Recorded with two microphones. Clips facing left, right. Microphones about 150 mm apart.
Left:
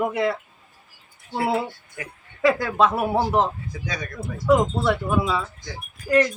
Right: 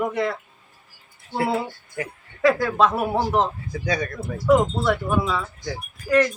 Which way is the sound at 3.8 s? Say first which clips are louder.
Right 6 dB; 35° right (ahead or behind).